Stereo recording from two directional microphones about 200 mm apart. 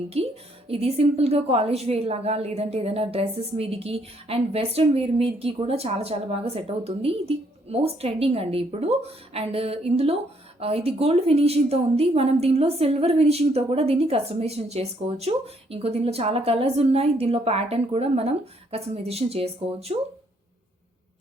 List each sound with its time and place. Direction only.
0.1 s a woman's voice: 30° right (ahead or behind)